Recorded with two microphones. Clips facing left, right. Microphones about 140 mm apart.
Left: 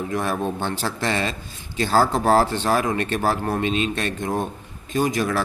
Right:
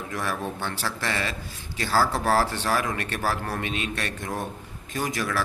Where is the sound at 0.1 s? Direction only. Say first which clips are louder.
Left 4 dB; 20° left (ahead or behind).